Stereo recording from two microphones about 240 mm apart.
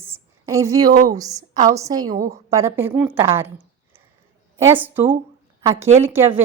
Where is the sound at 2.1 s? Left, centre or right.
Right.